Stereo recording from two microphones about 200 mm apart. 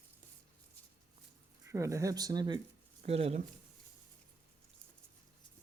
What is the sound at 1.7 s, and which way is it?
Speech, 15° right (ahead or behind).